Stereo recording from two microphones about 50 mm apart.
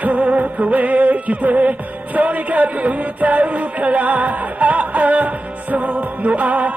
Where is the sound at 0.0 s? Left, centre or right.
Right.